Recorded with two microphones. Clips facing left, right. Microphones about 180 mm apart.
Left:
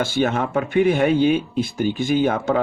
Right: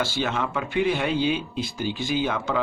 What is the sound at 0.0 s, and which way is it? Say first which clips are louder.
Speech: left 6 dB; 55° left (ahead or behind).